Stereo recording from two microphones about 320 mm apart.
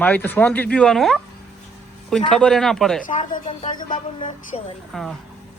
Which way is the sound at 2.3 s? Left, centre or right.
Centre.